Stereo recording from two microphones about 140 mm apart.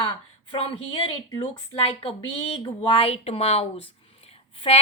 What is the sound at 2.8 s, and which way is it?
A woman's voice, 40° left (ahead or behind).